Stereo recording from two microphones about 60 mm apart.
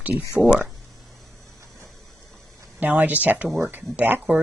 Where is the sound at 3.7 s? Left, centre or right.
Right.